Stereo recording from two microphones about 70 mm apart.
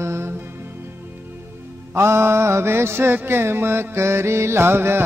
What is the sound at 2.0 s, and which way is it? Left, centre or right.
Mantra, right.